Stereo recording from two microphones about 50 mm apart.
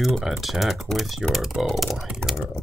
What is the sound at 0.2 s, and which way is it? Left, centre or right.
Speech, centre.